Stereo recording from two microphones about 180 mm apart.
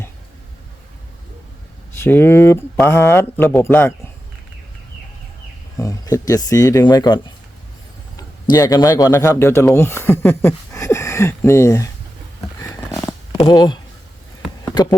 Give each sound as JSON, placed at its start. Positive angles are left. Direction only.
{"t": 1.9, "sound": "speech", "side_deg": 10}
{"t": 5.8, "sound": "speech", "side_deg": 20}
{"t": 8.5, "sound": "speech", "side_deg": 20}
{"t": 13.4, "sound": "speech", "side_deg": 20}